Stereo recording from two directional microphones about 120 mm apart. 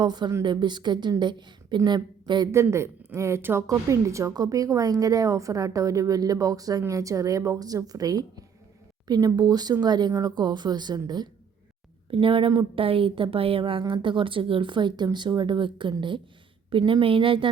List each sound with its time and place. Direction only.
0.0 s a woman's voice: 35° right (ahead or behind)
2.5 s a woman's voice: 25° right (ahead or behind)
12.1 s a woman's voice: 45° right (ahead or behind)